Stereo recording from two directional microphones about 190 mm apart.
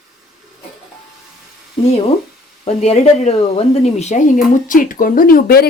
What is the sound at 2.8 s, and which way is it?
Speech, 35° left (ahead or behind).